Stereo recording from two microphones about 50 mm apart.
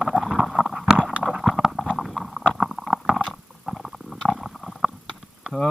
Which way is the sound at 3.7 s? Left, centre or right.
Centre.